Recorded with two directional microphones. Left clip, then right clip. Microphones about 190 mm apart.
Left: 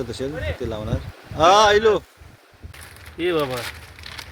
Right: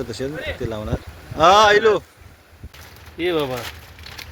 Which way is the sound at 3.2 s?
10° right (ahead or behind).